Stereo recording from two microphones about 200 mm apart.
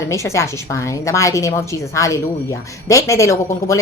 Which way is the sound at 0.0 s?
15° left (ahead or behind).